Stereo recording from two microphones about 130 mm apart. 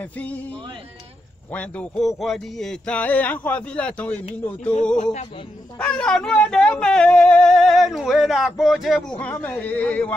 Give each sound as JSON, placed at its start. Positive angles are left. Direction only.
{"t": 0.0, "sound": "speech", "side_deg": 10}
{"t": 1.5, "sound": "speech", "side_deg": 10}
{"t": 4.9, "sound": "music", "side_deg": 65}
{"t": 5.8, "sound": "speech", "side_deg": 5}
{"t": 9.2, "sound": "speech", "side_deg": 15}